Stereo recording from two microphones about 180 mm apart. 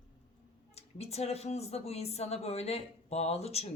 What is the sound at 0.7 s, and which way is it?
A woman's voice, 35° left (ahead or behind).